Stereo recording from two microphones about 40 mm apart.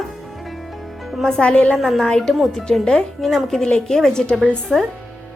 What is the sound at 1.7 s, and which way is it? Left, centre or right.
Speech, centre.